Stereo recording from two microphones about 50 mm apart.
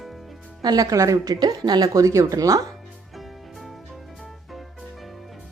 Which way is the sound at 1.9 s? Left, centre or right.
Right.